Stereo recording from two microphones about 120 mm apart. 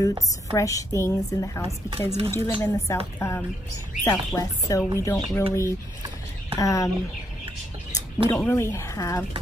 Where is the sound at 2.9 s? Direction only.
25° left (ahead or behind).